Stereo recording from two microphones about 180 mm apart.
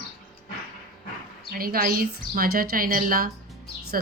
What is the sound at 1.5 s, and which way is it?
A woman's voice, 55° right (ahead or behind).